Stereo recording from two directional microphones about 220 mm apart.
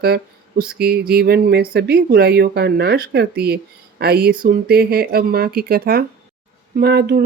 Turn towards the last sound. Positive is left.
turn(degrees=-45)  # may be behind; listen again after turning